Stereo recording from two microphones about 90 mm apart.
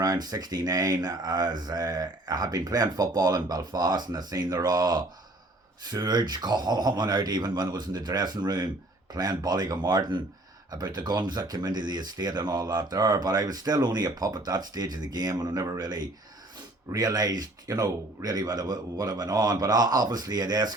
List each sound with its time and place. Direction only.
0.0 s speech: 45° right (ahead or behind)